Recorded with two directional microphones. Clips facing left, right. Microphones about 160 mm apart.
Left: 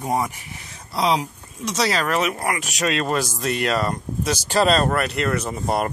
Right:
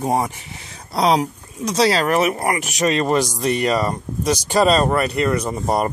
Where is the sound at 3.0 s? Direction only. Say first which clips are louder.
Right 5 dB; 15° right (ahead or behind).